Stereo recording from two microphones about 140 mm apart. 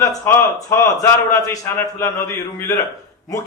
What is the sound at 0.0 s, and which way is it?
A man's voice, 20° left (ahead or behind).